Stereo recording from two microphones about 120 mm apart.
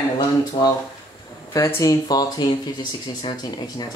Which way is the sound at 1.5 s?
25° left (ahead or behind).